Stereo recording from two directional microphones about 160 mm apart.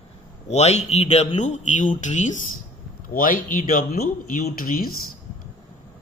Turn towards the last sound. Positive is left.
turn(degrees=60)  # may be behind; listen again after turning